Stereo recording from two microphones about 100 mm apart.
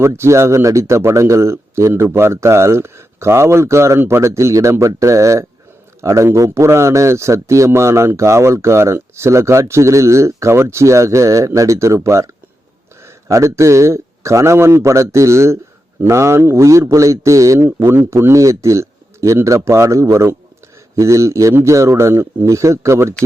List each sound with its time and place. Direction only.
0.0 s speech: 30° right (ahead or behind)